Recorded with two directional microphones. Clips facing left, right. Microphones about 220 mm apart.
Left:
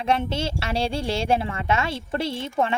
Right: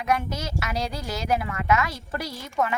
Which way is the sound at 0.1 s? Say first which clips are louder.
Left 3 dB; 30° left (ahead or behind).